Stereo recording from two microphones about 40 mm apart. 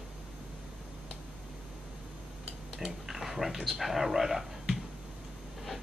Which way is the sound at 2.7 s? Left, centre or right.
Centre.